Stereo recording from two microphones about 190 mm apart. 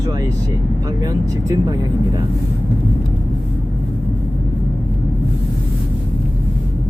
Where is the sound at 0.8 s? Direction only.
20° right (ahead or behind).